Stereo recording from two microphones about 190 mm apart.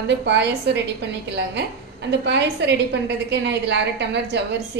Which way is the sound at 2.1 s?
65° right (ahead or behind).